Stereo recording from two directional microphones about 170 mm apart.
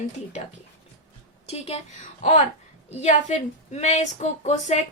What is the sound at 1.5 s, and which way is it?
Speech, 40° left (ahead or behind).